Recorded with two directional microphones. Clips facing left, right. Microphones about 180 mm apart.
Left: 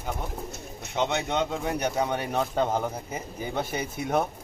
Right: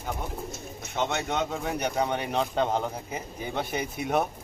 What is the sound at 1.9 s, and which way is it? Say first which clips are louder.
Speech: even; 5° left (ahead or behind).